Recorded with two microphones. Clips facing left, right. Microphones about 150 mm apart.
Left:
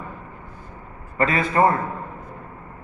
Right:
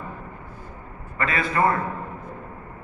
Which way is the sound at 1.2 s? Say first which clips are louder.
Left 4 dB; 35° left (ahead or behind).